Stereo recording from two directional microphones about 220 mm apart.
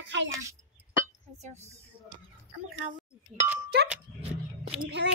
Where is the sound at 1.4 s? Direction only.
30° right (ahead or behind).